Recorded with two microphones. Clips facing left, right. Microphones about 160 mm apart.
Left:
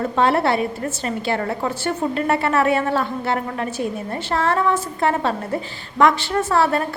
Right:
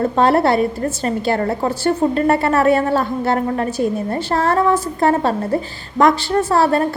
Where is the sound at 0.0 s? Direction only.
40° right (ahead or behind).